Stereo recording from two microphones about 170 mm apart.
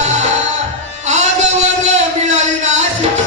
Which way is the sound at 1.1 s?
45° right (ahead or behind).